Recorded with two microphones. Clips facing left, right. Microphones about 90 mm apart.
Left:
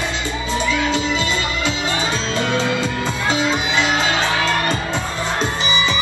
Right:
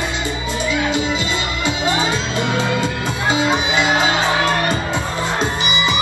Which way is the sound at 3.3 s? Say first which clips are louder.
Right 3 dB; 15° right (ahead or behind).